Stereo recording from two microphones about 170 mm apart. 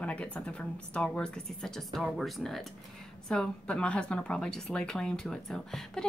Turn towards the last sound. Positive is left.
turn(degrees=5)  # may be behind; listen again after turning